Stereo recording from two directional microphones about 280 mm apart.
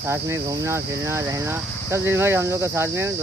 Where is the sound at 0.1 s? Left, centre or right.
Centre.